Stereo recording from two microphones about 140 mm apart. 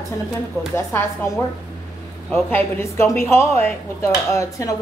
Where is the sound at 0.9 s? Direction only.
15° left (ahead or behind).